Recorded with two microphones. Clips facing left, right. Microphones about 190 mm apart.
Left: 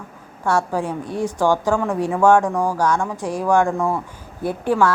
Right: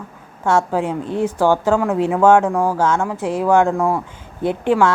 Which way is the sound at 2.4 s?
5° right (ahead or behind).